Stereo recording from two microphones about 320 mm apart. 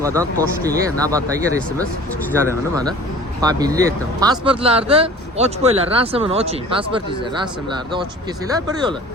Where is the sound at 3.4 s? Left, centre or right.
Centre.